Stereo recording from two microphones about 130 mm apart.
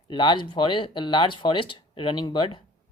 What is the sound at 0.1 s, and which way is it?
Speech, 35° left (ahead or behind).